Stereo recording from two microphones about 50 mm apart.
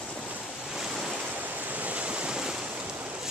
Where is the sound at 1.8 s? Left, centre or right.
Right.